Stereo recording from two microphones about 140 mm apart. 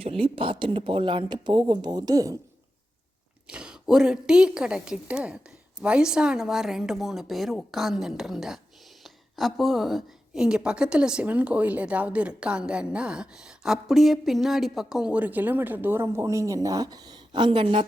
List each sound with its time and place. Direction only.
0.0 s speech: 40° right (ahead or behind); by 2.4 s 25° right (ahead or behind)
3.4 s a woman's voice: 5° right (ahead or behind); by 17.8 s 40° right (ahead or behind)